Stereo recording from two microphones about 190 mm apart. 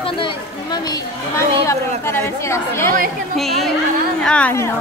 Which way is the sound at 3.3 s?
Centre (ahead or behind).